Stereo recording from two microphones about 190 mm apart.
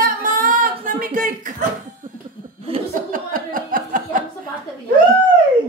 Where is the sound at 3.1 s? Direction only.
45° right (ahead or behind).